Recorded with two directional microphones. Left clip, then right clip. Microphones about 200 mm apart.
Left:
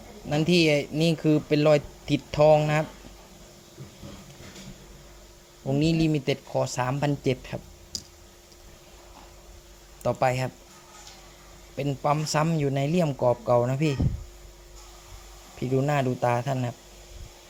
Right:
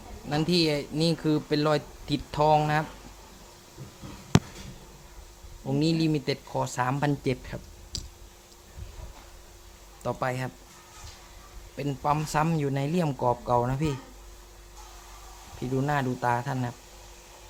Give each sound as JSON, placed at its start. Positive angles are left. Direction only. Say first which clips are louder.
{"t": 0.3, "sound": "speech", "louder": "left 3 dB", "side_deg": 10}
{"t": 5.6, "sound": "speech", "louder": "left 2 dB", "side_deg": 5}
{"t": 10.0, "sound": "speech", "louder": "left 6 dB", "side_deg": 15}
{"t": 11.8, "sound": "speech", "louder": "left 2 dB", "side_deg": 5}
{"t": 15.7, "sound": "speech", "louder": "left 3 dB", "side_deg": 10}